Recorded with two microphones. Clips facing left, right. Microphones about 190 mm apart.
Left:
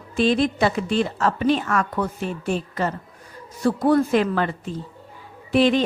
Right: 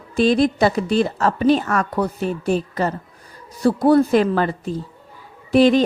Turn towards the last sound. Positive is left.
turn(degrees=-40)  # may be behind; listen again after turning